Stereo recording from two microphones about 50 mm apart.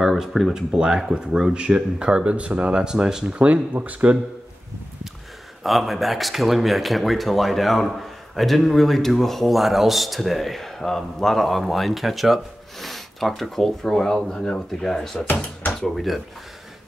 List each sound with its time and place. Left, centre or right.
0.0 s speech: centre; by 2.8 s right
2.8 s speech: centre
3.3 s speech: right
5.6 s speech: centre